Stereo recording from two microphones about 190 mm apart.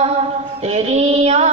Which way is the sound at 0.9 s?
35° right (ahead or behind).